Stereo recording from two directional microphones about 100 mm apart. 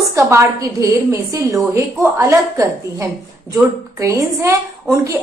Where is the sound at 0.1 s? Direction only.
30° right (ahead or behind).